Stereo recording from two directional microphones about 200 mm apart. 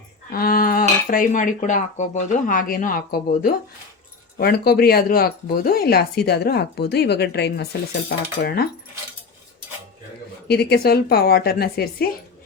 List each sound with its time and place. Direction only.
0.3 s speech: 45° left (ahead or behind)
10.5 s speech: 55° left (ahead or behind)